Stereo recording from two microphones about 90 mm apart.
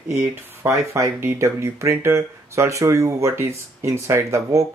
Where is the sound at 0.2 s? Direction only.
30° right (ahead or behind).